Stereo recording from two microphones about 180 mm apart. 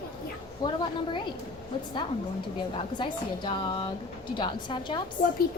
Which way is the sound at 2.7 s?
25° left (ahead or behind).